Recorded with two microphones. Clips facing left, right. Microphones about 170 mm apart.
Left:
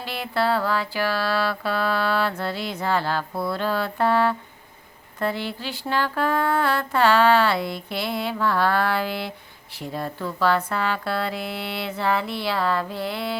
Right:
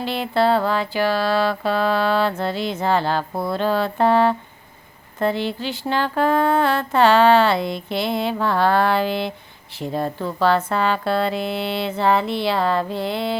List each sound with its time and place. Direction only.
0.0 s music: 25° right (ahead or behind)